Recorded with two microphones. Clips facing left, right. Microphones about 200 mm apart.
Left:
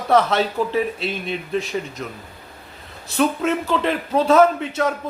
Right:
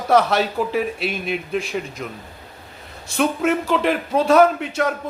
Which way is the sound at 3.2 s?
5° right (ahead or behind).